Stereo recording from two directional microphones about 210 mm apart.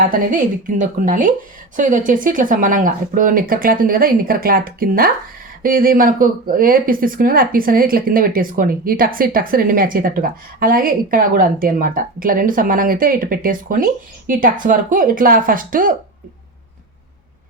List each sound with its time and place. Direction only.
0.1 s speech: 40° right (ahead or behind)